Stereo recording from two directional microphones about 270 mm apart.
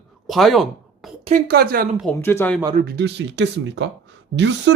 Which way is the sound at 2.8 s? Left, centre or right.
Right.